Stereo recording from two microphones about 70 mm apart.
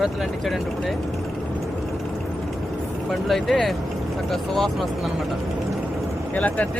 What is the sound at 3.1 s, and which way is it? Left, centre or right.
Speech, centre.